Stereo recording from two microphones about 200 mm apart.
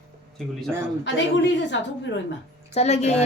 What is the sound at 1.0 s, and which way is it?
A woman's voice, 65° left (ahead or behind).